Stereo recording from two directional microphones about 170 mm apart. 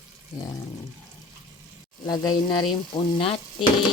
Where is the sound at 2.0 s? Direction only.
25° left (ahead or behind).